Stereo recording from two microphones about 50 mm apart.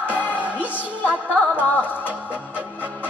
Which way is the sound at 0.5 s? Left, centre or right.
Left.